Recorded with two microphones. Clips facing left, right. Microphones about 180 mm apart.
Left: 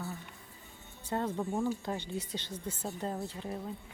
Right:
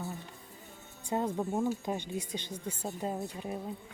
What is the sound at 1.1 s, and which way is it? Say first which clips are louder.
Speech: right 2 dB; 20° right (ahead or behind).